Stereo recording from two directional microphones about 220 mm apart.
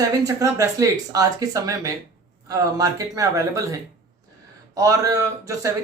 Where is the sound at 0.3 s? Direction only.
15° right (ahead or behind).